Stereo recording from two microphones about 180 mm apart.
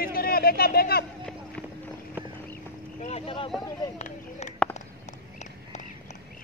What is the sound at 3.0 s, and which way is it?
Speech, 35° left (ahead or behind).